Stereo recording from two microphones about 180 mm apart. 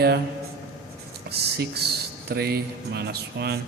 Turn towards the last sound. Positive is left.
turn(degrees=-65)  # may be behind; listen again after turning